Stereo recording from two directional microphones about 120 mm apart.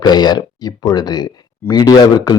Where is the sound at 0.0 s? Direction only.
35° left (ahead or behind).